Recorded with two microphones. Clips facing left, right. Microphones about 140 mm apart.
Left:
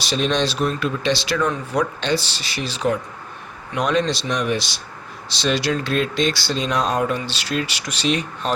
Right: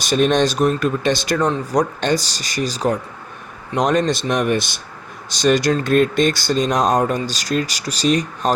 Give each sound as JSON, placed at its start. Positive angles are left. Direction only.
{"t": 0.0, "sound": "speech", "side_deg": -50}